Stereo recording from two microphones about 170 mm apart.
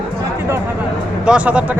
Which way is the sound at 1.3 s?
5° right (ahead or behind).